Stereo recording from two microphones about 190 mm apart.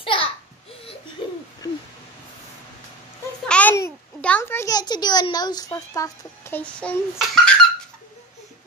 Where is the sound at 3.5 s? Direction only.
10° left (ahead or behind).